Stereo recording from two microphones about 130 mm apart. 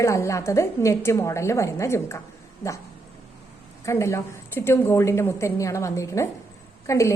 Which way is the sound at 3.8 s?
20° left (ahead or behind).